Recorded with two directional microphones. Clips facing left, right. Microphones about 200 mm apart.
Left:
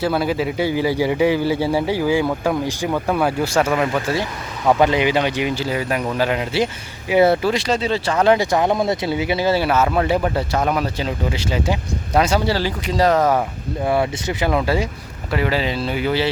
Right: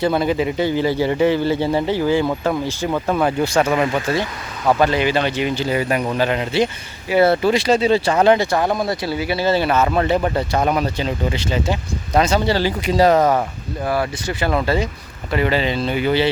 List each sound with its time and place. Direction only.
0.0 s speech: 5° left (ahead or behind)
4.8 s speech: 15° left (ahead or behind)
7.4 s speech: 5° right (ahead or behind)
8.4 s speech: 15° left (ahead or behind)
12.8 s speech: 5° right (ahead or behind)
13.8 s speech: 20° left (ahead or behind); by 16.3 s centre (ahead or behind)